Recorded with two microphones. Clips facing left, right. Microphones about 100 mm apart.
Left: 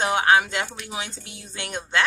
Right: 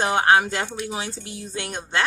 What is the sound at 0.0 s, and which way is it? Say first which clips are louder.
A woman's voice: right 1 dB; 35° right (ahead or behind).